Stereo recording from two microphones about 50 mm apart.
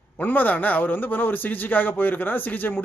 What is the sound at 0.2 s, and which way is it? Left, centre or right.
A man's voice, left.